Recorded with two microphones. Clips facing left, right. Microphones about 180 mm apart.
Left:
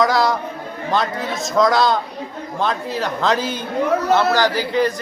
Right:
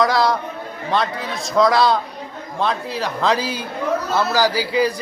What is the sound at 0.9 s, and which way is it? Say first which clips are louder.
A man's voice: left 1 dB; centre (ahead or behind).